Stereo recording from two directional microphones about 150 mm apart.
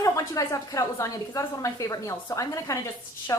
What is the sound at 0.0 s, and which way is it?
A woman's voice, 20° left (ahead or behind).